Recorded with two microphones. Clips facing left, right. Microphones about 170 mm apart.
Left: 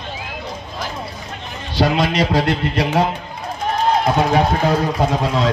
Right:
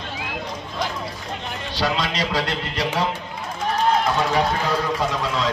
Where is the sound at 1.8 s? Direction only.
55° left (ahead or behind).